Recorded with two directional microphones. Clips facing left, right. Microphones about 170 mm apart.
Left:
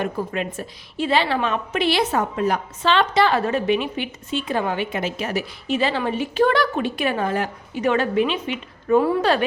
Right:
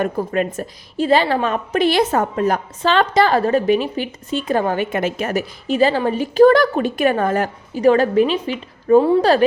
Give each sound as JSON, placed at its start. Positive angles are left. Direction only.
{"t": 0.0, "sound": "a woman's voice", "side_deg": -45}